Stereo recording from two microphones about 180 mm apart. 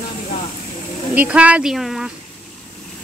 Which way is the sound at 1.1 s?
10° right (ahead or behind).